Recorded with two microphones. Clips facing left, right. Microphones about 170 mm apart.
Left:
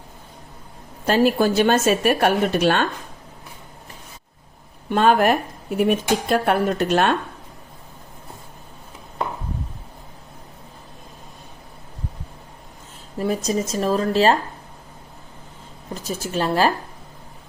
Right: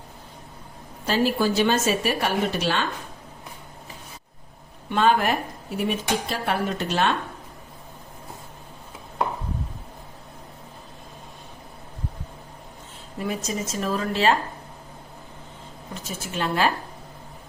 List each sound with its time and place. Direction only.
1.0 s a woman's voice: 55° left (ahead or behind)
4.9 s speech: 50° left (ahead or behind)
13.1 s speech: 40° left (ahead or behind)
16.0 s speech: 35° left (ahead or behind)